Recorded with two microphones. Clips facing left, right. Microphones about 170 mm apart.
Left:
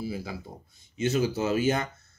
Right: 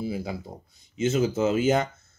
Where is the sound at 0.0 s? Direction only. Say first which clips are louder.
Right 3 dB; 25° right (ahead or behind).